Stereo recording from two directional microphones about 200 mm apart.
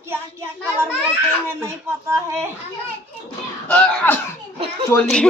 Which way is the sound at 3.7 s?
5° left (ahead or behind).